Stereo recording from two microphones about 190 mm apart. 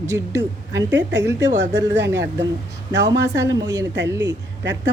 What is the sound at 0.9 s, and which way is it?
Speech, 70° right (ahead or behind).